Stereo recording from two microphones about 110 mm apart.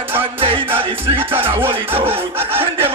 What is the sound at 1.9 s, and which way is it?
Music, 60° right (ahead or behind).